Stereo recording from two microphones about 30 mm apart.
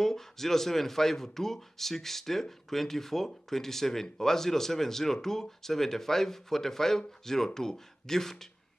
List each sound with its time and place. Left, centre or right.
0.0 s speech: centre